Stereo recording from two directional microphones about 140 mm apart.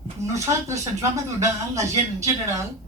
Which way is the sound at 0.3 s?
20° right (ahead or behind).